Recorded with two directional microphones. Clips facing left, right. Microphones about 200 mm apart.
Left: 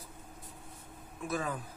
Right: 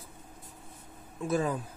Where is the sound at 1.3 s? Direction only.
30° right (ahead or behind).